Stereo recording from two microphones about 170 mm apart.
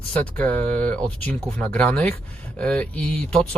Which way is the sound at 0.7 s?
10° left (ahead or behind).